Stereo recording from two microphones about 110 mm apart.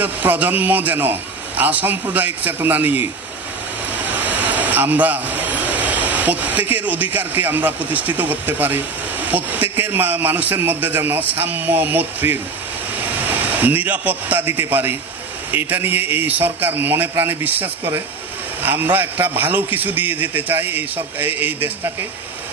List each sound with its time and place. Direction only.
0.0 s a man's voice: 15° right (ahead or behind)
4.2 s a man's voice: 15° right (ahead or behind)
13.5 s a man's voice: 15° right (ahead or behind)